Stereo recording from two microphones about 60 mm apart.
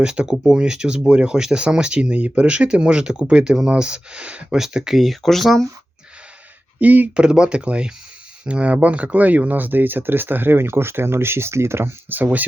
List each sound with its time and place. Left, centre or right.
0.0 s speech: centre
4.5 s speech: centre
6.7 s speech: right
7.3 s speech: centre